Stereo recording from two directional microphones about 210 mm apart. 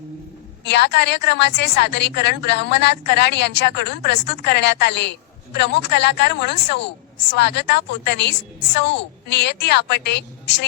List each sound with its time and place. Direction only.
0.6 s a woman's voice: 55° left (ahead or behind)